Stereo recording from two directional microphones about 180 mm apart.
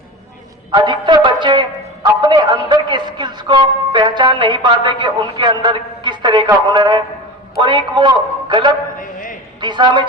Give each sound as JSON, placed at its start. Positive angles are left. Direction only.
{"t": 0.7, "sound": "a man's voice", "side_deg": -25}
{"t": 9.0, "sound": "a sound", "side_deg": 50}
{"t": 9.6, "sound": "a man's voice", "side_deg": -25}